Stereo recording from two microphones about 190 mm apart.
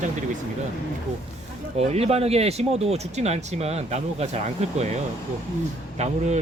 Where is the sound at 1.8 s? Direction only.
35° right (ahead or behind).